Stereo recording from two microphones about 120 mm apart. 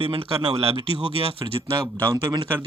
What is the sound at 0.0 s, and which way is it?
Speech, 50° right (ahead or behind).